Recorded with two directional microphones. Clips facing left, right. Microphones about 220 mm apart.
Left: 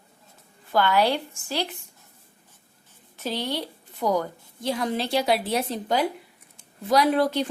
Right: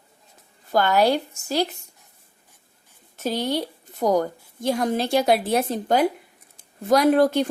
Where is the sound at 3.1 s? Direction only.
45° right (ahead or behind).